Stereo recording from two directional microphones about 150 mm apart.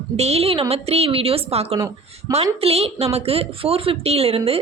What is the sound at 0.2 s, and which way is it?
A woman's voice, 45° right (ahead or behind).